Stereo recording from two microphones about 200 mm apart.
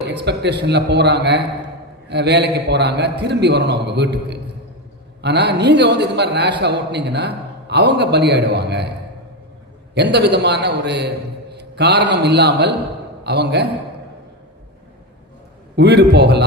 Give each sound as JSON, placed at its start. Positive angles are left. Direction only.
{"t": 0.2, "sound": "a man's voice", "side_deg": -55}
{"t": 9.9, "sound": "a man's voice", "side_deg": -60}
{"t": 15.7, "sound": "a man's voice", "side_deg": -55}